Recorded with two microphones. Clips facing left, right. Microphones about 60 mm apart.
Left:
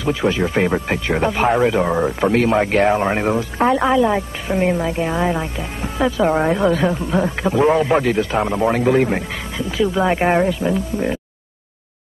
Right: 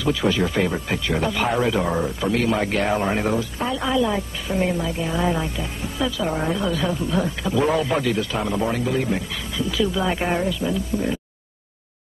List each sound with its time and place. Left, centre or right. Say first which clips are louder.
0.2 s speech: left 3 dB; left
2.0 s speech: left 5 dB; left
3.5 s speech: left 9 dB; left
3.9 s speech: left 5 dB; left
5.2 s speech: left 3 dB; left
8.7 s speech: left 7 dB; left